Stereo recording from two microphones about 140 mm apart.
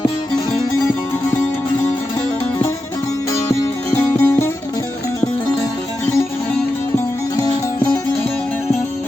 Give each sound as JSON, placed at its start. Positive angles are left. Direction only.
{"t": 3.5, "sound": "music", "side_deg": 20}